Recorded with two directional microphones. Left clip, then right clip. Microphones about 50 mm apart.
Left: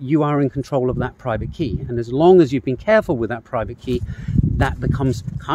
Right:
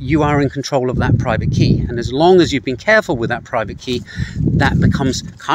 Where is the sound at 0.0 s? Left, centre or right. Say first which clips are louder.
Right 3 dB; left.